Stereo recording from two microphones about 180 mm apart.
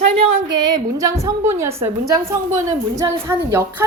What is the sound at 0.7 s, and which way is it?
A woman's voice, 20° right (ahead or behind).